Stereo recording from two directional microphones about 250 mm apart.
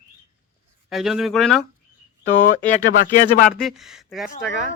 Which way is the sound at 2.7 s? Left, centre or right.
Left.